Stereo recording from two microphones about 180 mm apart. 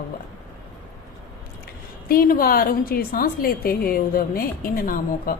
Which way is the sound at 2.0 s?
55° left (ahead or behind).